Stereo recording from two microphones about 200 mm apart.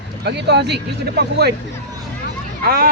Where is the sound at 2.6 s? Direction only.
50° right (ahead or behind).